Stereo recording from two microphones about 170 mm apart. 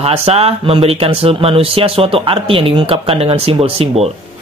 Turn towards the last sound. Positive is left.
turn(degrees=-35)  # may be behind; listen again after turning